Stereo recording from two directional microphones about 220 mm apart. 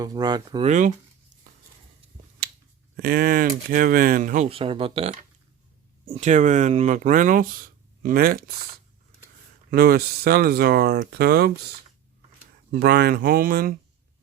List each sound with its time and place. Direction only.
0.0 s speech: 20° right (ahead or behind)
0.7 s speech: 35° right (ahead or behind)
2.4 s finger snapping: 45° right (ahead or behind)
2.9 s speech: 45° right (ahead or behind)
9.6 s speech: 45° right (ahead or behind)
12.7 s speech: 45° right (ahead or behind)